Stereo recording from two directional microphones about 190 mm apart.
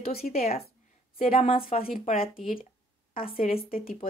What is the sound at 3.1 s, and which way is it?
Speech, 50° left (ahead or behind).